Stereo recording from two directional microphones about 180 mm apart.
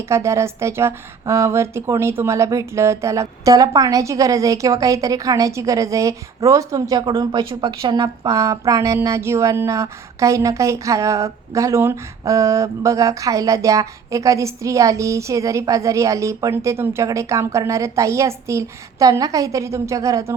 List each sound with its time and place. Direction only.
0.1 s a woman's voice: 15° right (ahead or behind)